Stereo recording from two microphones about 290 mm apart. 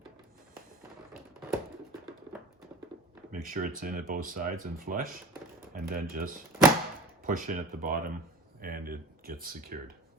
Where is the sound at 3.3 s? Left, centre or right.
Right.